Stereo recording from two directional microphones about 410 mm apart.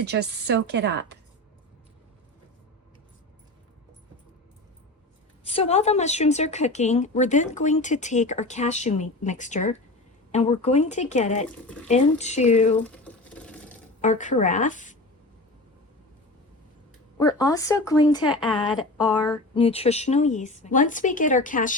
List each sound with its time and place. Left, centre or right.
0.0 s a woman's voice: right
5.5 s a woman's voice: centre
12.8 s a sound: centre
14.0 s a woman's voice: centre
17.2 s a woman's voice: centre
19.1 s a woman's voice: centre